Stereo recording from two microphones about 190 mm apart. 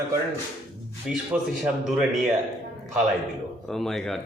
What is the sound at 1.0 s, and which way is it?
Speech, 5° right (ahead or behind).